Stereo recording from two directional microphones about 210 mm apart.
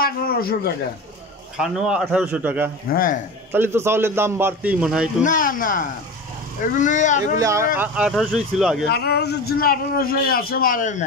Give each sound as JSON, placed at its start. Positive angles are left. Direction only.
{"t": 0.0, "sound": "a sound", "side_deg": 45}
{"t": 1.6, "sound": "a man's voice", "side_deg": -5}
{"t": 2.9, "sound": "a man's voice", "side_deg": 40}
{"t": 3.5, "sound": "a man's voice", "side_deg": -10}
{"t": 5.2, "sound": "speech", "side_deg": 40}
{"t": 7.3, "sound": "a man's voice", "side_deg": -15}
{"t": 8.8, "sound": "a man's voice", "side_deg": 50}